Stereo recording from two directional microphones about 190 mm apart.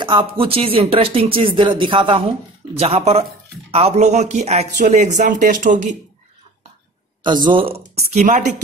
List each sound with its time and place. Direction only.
0.0 s speech: 25° right (ahead or behind); by 5.9 s 40° right (ahead or behind)
7.2 s speech: 25° right (ahead or behind)